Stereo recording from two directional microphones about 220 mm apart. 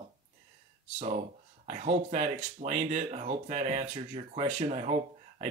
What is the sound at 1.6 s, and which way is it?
Speech, 35° right (ahead or behind).